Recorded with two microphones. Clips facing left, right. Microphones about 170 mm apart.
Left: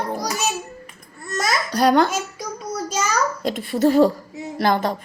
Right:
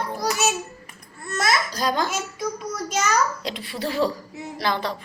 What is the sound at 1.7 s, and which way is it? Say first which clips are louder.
Speech: left 8 dB; 65° left (ahead or behind).